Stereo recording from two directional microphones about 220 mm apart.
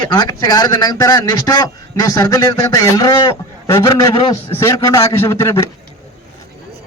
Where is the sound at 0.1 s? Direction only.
20° left (ahead or behind).